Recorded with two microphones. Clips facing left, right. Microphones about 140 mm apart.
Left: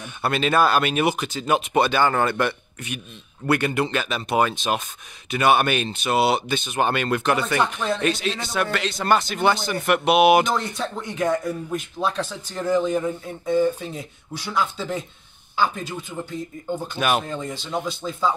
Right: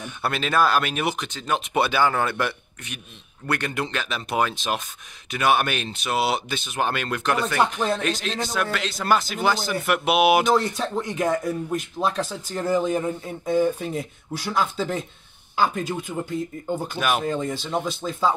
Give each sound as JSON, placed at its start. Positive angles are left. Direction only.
{"t": 0.0, "sound": "a man's voice", "side_deg": 0}
{"t": 1.7, "sound": "a man's voice", "side_deg": -5}
{"t": 15.5, "sound": "a man's voice", "side_deg": -5}